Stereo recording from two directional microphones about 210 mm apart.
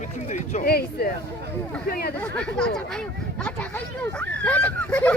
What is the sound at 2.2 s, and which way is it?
Speech, 5° left (ahead or behind).